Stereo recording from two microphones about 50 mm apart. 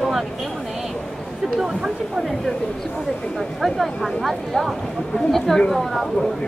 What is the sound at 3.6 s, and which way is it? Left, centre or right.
Speech, centre.